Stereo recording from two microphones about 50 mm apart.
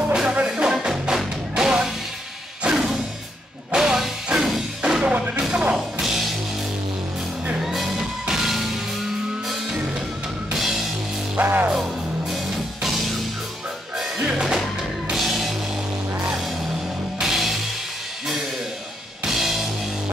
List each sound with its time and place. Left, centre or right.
0.1 s music: centre
5.0 s music: right
5.8 s music: centre
7.6 s music: centre
11.4 s music: right
12.3 s music: centre
14.1 s music: right
14.8 s music: centre
19.2 s music: centre